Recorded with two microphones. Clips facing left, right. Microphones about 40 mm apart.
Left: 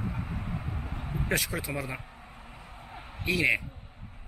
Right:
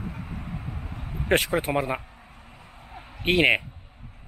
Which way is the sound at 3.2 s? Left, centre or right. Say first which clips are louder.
Right 6 dB; right.